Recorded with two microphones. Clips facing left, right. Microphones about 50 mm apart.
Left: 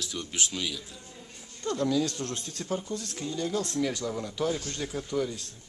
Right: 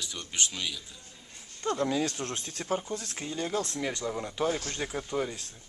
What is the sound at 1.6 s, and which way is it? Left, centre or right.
Speech, right.